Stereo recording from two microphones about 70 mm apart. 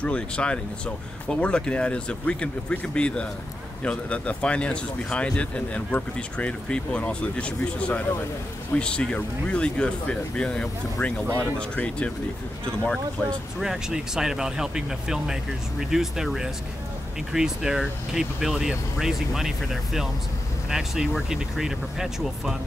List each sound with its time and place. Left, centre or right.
0.0 s speech: centre
13.6 s speech: centre